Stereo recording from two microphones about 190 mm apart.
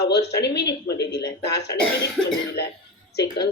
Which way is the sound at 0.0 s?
60° left (ahead or behind).